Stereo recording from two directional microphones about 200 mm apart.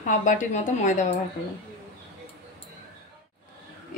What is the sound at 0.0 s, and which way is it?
Speech, 40° left (ahead or behind).